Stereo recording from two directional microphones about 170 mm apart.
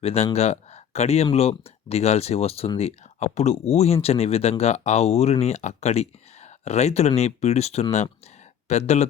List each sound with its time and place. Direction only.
0.0 s speech: 35° left (ahead or behind)